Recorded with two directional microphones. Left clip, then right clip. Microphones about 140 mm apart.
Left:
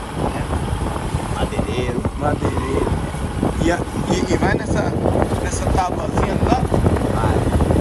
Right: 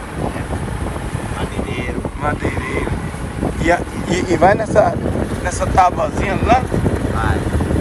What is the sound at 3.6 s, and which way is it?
Speech, 30° left (ahead or behind).